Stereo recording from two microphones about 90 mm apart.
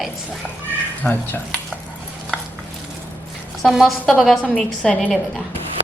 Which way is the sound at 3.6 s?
Centre (ahead or behind).